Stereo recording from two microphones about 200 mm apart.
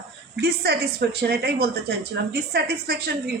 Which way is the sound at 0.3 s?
55° right (ahead or behind).